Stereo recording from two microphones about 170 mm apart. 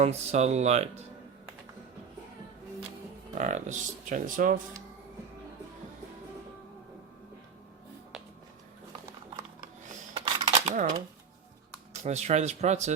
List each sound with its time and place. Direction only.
0.0 s speech: 40° right (ahead or behind)
3.3 s speech: 45° right (ahead or behind)
10.4 s dishes: 40° right (ahead or behind)
12.0 s speech: 40° right (ahead or behind)